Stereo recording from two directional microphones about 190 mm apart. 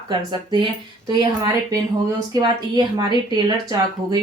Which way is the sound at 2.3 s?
20° right (ahead or behind).